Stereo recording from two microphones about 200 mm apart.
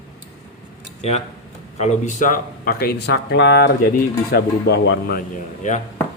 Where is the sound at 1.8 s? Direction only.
40° left (ahead or behind).